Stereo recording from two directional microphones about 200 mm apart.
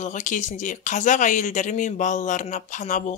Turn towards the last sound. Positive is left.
turn(degrees=40)  # may be behind; listen again after turning